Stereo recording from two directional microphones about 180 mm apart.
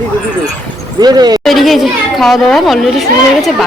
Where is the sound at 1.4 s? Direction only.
Centre (ahead or behind).